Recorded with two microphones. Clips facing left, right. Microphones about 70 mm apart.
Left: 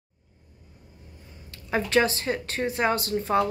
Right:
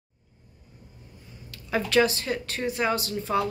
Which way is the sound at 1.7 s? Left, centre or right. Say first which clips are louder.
Even; left.